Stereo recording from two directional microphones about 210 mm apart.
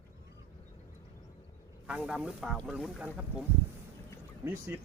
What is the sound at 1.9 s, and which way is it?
Speech, 5° right (ahead or behind).